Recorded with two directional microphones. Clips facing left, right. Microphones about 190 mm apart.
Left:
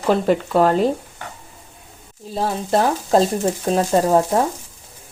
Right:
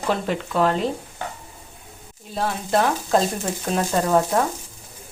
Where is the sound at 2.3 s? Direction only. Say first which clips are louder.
Left 3 dB; 35° left (ahead or behind).